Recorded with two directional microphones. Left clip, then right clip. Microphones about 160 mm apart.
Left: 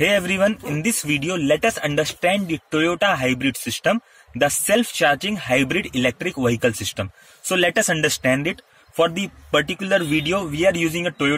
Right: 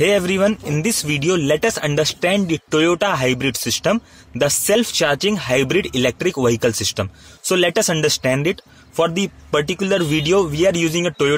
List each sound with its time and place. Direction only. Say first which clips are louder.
0.0 s speech: right 2 dB; 40° right (ahead or behind)